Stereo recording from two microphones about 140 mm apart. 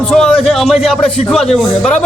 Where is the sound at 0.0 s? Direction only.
5° left (ahead or behind).